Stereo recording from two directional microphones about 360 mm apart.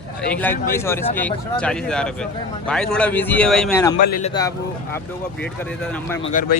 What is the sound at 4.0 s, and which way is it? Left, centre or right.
Speech, left.